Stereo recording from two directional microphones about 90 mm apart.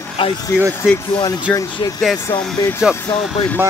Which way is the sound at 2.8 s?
10° right (ahead or behind).